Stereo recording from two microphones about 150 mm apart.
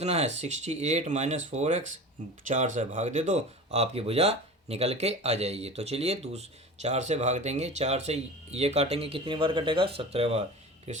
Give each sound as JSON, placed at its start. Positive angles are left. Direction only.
{"t": 0.0, "sound": "speech", "side_deg": -45}